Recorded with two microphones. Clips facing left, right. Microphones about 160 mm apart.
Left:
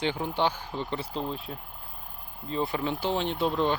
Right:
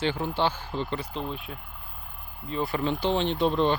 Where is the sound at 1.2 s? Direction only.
35° left (ahead or behind).